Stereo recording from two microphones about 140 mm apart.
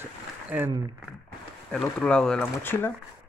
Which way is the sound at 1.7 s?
5° left (ahead or behind).